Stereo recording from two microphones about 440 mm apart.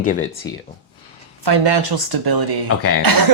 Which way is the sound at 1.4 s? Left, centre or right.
Right.